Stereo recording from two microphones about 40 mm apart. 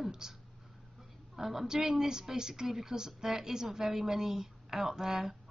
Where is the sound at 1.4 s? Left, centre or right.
Centre.